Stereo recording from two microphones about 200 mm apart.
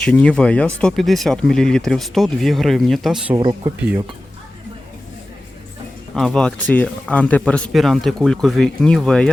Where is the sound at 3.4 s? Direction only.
20° right (ahead or behind).